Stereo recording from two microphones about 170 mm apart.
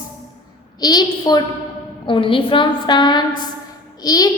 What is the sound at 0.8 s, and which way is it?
A child's voice, 25° left (ahead or behind).